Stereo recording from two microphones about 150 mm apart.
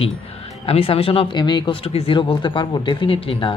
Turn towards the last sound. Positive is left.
turn(degrees=40)  # may be behind; listen again after turning